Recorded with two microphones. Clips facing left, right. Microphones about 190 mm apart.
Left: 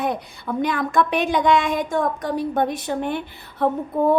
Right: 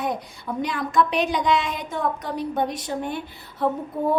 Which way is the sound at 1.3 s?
50° left (ahead or behind).